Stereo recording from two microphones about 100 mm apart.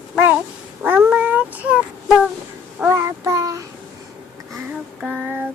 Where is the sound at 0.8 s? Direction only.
15° right (ahead or behind).